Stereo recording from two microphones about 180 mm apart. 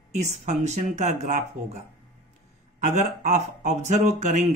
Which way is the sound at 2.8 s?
40° right (ahead or behind).